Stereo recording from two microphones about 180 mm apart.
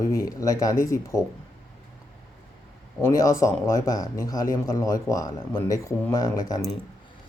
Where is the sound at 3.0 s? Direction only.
15° left (ahead or behind).